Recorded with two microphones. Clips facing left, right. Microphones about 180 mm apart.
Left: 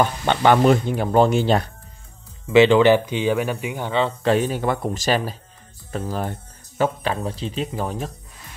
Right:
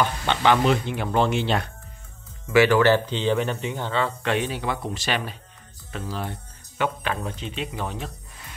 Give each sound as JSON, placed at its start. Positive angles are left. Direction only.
{"t": 0.0, "sound": "speech", "side_deg": 50}
{"t": 2.4, "sound": "speech", "side_deg": 20}
{"t": 4.2, "sound": "speech", "side_deg": 40}
{"t": 6.8, "sound": "speech", "side_deg": 35}